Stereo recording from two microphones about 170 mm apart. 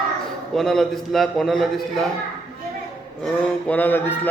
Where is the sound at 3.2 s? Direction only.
5° left (ahead or behind).